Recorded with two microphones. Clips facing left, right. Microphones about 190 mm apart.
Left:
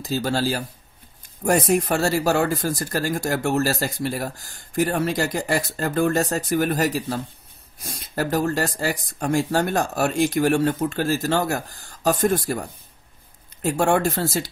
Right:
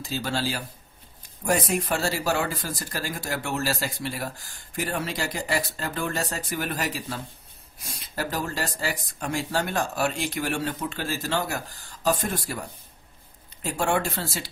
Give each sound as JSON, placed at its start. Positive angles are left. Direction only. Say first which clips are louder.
{"t": 0.0, "sound": "speech", "louder": "left 6 dB", "side_deg": 40}